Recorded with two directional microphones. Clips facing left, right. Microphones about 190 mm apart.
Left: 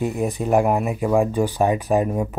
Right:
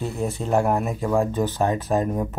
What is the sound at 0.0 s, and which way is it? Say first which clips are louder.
Speech: left 4 dB; 15° left (ahead or behind).